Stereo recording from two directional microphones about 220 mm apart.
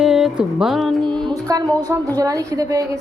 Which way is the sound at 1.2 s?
15° right (ahead or behind).